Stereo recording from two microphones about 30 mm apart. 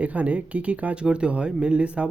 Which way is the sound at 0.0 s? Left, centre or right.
Right.